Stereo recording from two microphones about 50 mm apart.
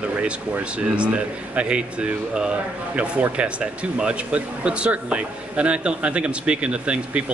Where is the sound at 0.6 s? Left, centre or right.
Right.